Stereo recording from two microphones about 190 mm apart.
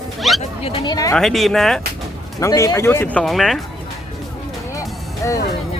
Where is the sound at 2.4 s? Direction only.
15° left (ahead or behind); by 3.6 s centre (ahead or behind).